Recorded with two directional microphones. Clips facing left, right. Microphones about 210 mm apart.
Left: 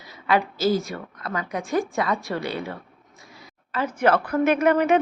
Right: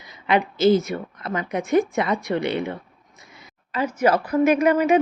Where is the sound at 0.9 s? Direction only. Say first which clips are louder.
Right 4 dB; 25° right (ahead or behind).